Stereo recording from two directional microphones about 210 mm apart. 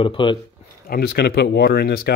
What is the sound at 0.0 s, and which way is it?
Speech, 25° left (ahead or behind).